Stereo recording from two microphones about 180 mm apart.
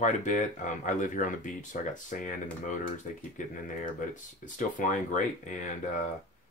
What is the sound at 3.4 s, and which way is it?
Speech, 45° left (ahead or behind).